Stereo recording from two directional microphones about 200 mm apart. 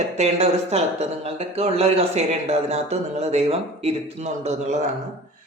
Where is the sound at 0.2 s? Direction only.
35° right (ahead or behind).